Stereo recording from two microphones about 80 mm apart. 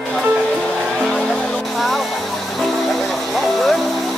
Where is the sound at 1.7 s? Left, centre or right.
Centre.